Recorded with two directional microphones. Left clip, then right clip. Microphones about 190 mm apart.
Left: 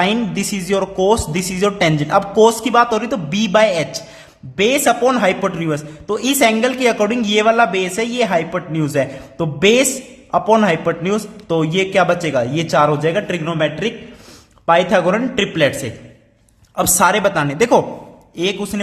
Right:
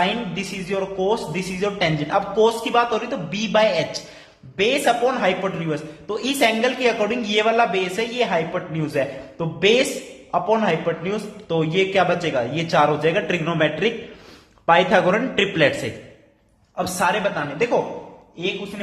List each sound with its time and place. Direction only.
0.0 s a man's voice: 35° left (ahead or behind)
16.7 s a man's voice: 40° left (ahead or behind)
18.7 s a man's voice: 55° left (ahead or behind)